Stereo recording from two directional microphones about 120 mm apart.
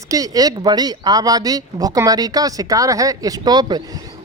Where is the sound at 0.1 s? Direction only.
30° right (ahead or behind).